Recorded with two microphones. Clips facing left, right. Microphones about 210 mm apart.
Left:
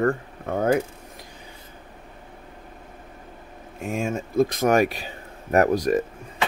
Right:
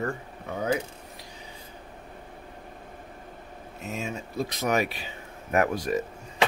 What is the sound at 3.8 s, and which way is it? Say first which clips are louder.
Speech: left 7 dB; 50° left (ahead or behind).